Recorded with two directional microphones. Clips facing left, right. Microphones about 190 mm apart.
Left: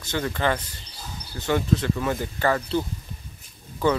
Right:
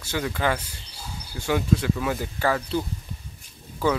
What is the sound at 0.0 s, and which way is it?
Speech, 10° right (ahead or behind).